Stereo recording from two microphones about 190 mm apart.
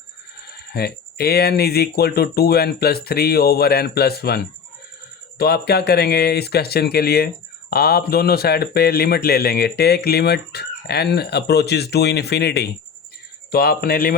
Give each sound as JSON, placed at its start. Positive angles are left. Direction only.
{"t": 0.4, "sound": "speech", "side_deg": 55}